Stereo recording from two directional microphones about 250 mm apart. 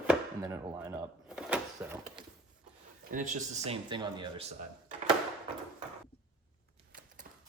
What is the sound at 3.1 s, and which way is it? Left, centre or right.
Speech, right.